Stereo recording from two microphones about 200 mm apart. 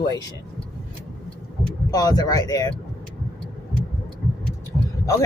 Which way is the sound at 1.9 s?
20° left (ahead or behind).